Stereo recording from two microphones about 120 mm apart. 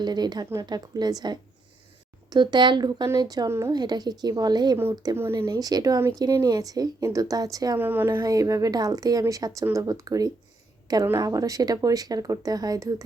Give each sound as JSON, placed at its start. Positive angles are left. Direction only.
{"t": 0.0, "sound": "speech", "side_deg": -35}
{"t": 5.1, "sound": "speech", "side_deg": -20}
{"t": 5.5, "sound": "speech", "side_deg": -35}
{"t": 7.8, "sound": "a woman's voice", "side_deg": -15}